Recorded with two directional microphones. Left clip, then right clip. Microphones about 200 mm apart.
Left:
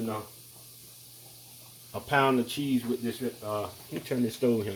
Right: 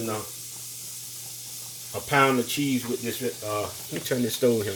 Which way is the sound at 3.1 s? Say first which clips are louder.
Right 4 dB; 10° left (ahead or behind).